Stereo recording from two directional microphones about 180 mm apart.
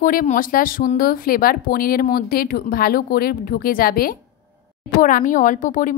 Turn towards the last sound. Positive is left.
turn(degrees=45)  # may be behind; listen again after turning